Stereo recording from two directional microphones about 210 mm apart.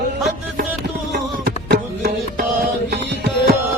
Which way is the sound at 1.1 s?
50° right (ahead or behind).